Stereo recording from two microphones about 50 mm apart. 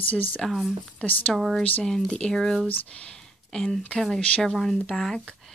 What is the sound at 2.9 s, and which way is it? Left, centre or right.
Speech, left.